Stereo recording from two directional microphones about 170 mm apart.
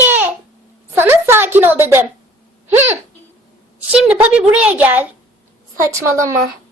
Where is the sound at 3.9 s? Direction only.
5° right (ahead or behind).